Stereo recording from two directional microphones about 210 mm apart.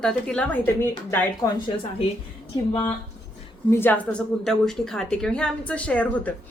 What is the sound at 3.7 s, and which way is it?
A woman's voice, 10° left (ahead or behind).